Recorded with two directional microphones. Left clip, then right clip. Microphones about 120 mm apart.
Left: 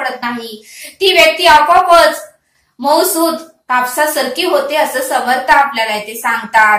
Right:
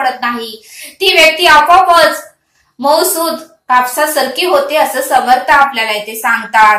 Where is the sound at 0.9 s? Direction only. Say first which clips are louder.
Right 1 dB; 25° right (ahead or behind).